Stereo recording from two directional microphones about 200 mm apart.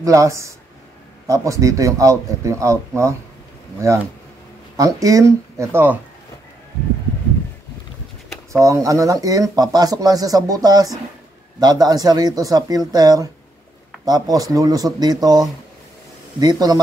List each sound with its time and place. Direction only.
0.0 s speech: 15° right (ahead or behind)
3.8 s speech: 15° right (ahead or behind)
8.5 s speech: 15° right (ahead or behind)